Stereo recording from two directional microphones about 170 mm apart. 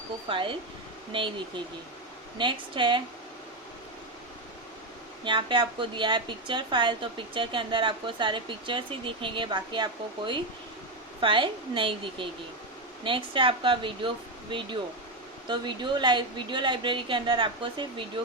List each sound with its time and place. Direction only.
0.3 s speech: 30° right (ahead or behind)
5.2 s speech: 30° right (ahead or behind)
15.4 s speech: 25° right (ahead or behind)